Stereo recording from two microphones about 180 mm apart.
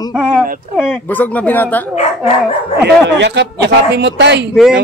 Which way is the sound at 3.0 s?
75° right (ahead or behind).